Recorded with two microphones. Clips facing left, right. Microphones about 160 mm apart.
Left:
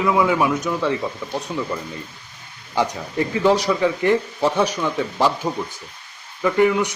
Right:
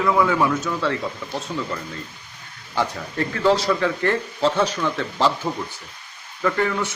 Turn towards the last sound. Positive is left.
turn(degrees=15)  # may be behind; listen again after turning